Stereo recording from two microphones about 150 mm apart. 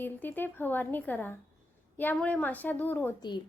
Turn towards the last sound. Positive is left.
turn(degrees=30)  # may be behind; listen again after turning